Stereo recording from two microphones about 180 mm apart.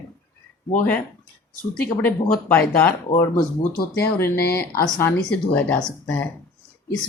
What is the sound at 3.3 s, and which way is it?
Speech, 55° left (ahead or behind).